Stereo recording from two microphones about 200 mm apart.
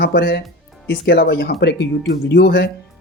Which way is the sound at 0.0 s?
55° left (ahead or behind).